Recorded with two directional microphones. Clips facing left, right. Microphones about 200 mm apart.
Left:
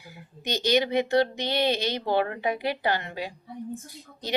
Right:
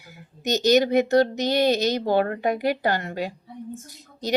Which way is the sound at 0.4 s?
45° right (ahead or behind).